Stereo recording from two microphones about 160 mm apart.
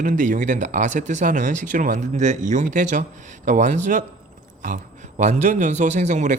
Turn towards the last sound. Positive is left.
turn(degrees=-50)  # may be behind; listen again after turning